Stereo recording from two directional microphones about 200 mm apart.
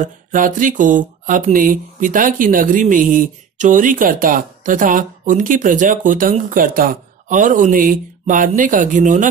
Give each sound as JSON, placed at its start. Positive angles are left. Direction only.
{"t": 0.0, "sound": "speech", "side_deg": -40}